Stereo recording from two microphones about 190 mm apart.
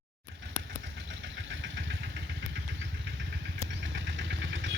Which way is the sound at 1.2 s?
75° right (ahead or behind).